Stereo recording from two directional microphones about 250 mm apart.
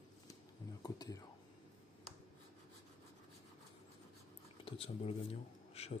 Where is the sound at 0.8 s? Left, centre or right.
Centre.